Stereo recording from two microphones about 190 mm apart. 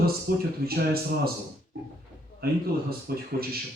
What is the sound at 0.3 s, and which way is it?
Speech, 55° right (ahead or behind).